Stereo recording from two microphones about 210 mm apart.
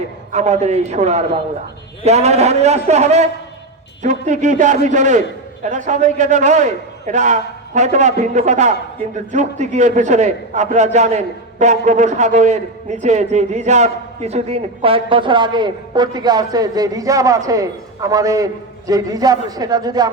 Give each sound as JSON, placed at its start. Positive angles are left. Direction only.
{"t": 0.3, "sound": "a man's voice", "side_deg": -30}